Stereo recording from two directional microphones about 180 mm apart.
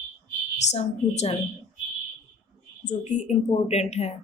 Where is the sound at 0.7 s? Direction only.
35° left (ahead or behind).